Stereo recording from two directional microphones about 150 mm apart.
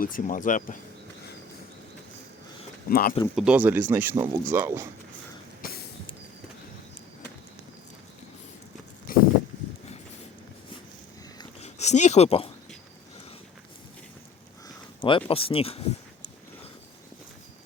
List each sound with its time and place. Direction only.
0.0 s speech: 65° left (ahead or behind)
2.9 s speech: 80° left
3.3 s speech: 5° right (ahead or behind)
9.1 s a sound: 70° left (ahead or behind)
11.6 s speech: 50° left (ahead or behind)
15.0 s speech: 35° left (ahead or behind)